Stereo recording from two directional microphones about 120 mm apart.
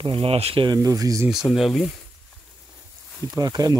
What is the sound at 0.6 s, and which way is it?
Speech, 30° right (ahead or behind).